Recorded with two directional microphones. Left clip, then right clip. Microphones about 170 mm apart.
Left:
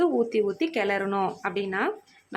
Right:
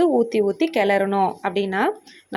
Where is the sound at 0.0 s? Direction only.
20° right (ahead or behind).